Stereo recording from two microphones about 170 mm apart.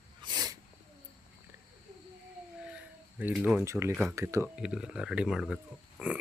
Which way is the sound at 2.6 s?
10° right (ahead or behind).